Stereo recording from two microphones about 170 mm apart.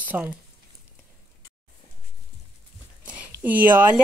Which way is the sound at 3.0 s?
10° right (ahead or behind).